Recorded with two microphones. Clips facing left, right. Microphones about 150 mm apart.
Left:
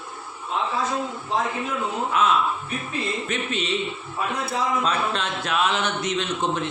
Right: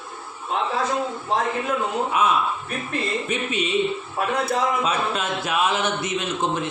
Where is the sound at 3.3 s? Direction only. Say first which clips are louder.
Right 2 dB; 10° right (ahead or behind).